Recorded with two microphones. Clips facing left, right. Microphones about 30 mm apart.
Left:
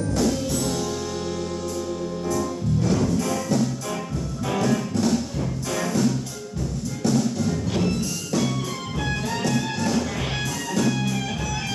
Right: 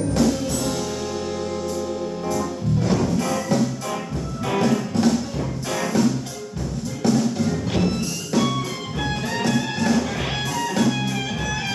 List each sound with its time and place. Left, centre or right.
2.2 s music: right